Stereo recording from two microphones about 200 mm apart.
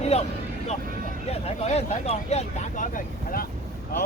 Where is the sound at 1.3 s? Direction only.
30° left (ahead or behind).